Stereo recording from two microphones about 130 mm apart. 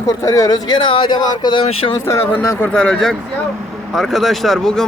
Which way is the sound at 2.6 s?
5° left (ahead or behind).